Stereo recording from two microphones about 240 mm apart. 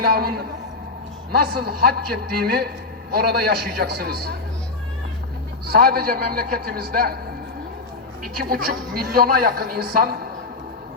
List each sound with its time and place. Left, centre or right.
0.0 s a woman's voice: right
5.6 s a woman's voice: right
8.2 s a woman's voice: right